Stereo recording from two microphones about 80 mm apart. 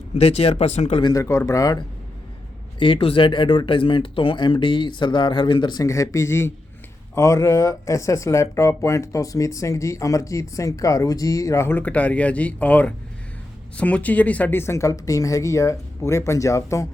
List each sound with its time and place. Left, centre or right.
1.1 s speech: left
2.7 s speech: left
5.8 s speech: left
11.8 s speech: centre
14.6 s speech: left